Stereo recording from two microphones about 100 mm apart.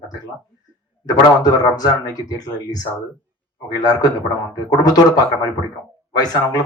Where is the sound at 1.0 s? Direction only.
40° left (ahead or behind).